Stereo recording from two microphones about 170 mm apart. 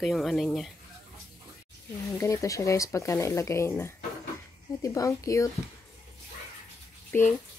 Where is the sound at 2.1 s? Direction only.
20° left (ahead or behind).